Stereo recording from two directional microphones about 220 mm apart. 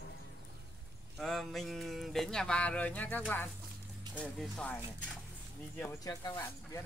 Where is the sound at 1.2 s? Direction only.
Centre (ahead or behind).